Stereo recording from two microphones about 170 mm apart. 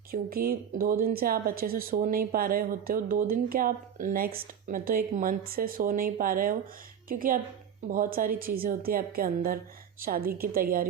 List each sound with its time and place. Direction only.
0.1 s speech: 60° right (ahead or behind)